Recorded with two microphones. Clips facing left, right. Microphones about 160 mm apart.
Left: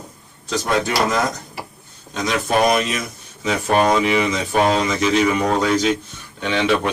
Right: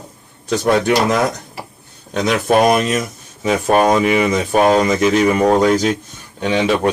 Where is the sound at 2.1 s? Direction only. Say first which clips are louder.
Right 5 dB; 55° right (ahead or behind).